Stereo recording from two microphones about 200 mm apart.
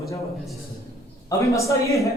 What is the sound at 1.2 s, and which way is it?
Speech, 15° left (ahead or behind).